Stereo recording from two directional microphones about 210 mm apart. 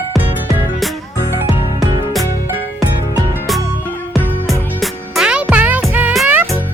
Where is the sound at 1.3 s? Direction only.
15° right (ahead or behind).